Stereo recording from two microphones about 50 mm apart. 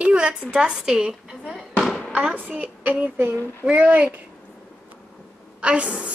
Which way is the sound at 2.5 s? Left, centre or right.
Right.